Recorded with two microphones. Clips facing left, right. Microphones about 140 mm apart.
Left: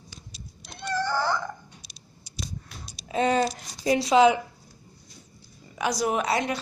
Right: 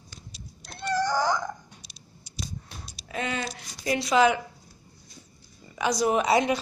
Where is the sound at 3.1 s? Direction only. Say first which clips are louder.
Left 8 dB; 35° left (ahead or behind).